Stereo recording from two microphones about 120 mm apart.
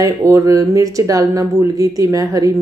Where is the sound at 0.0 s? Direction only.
25° right (ahead or behind).